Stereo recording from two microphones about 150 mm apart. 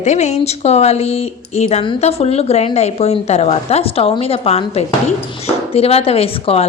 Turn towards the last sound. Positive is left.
turn(degrees=40)  # may be behind; listen again after turning